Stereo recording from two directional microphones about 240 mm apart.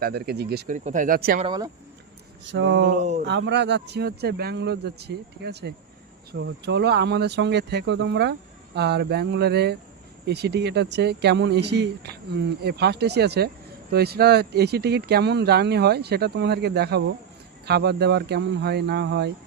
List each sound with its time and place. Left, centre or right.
0.0 s speech: right
1.5 s speech: centre
2.5 s speech: right
2.9 s speech: right
3.2 s speech: right